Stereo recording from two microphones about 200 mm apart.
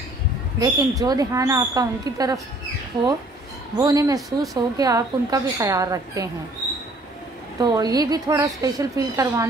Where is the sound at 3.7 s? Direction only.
20° right (ahead or behind).